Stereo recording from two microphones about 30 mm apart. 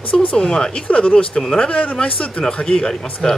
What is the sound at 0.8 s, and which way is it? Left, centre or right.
Speech, left.